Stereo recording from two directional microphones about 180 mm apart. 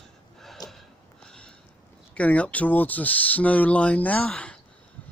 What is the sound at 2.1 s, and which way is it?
Speech, 10° left (ahead or behind).